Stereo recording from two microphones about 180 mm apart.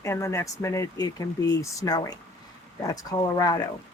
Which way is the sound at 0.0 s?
15° left (ahead or behind).